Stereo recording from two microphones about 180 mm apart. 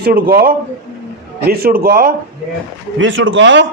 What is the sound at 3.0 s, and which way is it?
Speech, 90° right.